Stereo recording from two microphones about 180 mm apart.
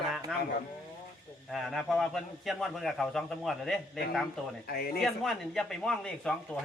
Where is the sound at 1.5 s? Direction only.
Centre (ahead or behind).